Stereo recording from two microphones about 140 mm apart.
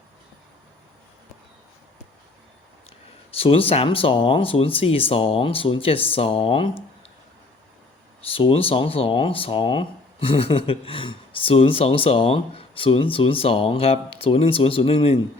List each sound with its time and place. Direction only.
3.3 s speech: 45° left (ahead or behind)
8.2 s speech: 40° left (ahead or behind)